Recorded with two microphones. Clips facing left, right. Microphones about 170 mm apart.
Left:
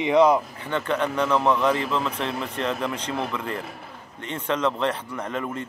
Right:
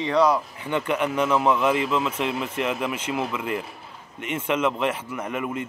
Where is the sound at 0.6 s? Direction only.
15° right (ahead or behind).